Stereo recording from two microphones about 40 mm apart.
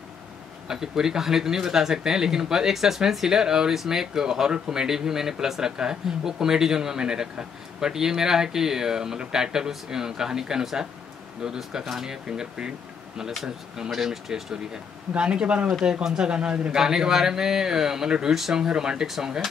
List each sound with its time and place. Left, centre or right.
0.7 s speech: centre
13.8 s speech: centre; by 15.7 s right
15.8 s speech: centre
16.3 s speech: right
16.7 s speech: centre